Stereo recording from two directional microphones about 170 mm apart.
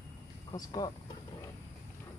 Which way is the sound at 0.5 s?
25° left (ahead or behind).